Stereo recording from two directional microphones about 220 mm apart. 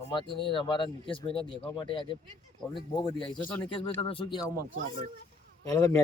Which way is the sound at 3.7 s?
25° left (ahead or behind).